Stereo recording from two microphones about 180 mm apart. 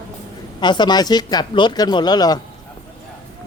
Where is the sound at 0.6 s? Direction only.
25° left (ahead or behind).